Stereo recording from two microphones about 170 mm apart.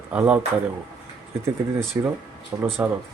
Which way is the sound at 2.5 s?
15° right (ahead or behind).